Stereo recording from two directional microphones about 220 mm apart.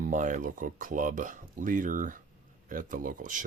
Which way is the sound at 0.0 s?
35° right (ahead or behind).